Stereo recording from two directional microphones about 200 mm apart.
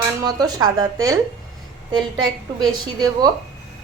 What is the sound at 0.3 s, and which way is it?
Speech, 20° right (ahead or behind).